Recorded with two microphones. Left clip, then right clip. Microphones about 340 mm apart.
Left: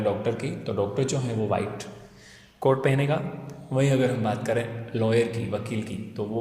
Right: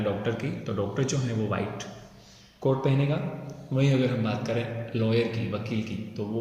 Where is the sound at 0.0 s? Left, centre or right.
Centre.